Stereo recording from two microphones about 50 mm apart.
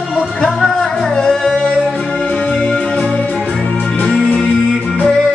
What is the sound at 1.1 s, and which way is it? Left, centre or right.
Music, centre.